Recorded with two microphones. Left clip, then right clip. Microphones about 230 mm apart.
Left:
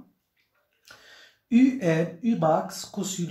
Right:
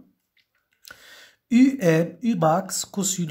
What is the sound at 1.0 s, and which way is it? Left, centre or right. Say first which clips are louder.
Speech: right 3 dB; right.